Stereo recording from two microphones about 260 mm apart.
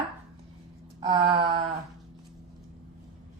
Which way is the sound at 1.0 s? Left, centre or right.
Centre.